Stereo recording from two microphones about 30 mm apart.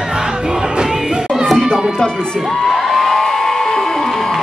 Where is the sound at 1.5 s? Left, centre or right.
Left.